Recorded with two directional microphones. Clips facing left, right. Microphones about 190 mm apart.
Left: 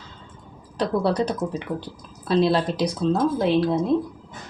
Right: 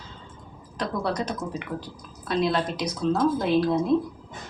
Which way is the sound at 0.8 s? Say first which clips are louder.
Left 6 dB; 35° left (ahead or behind).